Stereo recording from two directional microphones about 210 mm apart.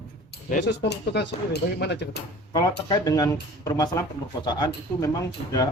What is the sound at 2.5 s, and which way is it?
Speech, 20° left (ahead or behind).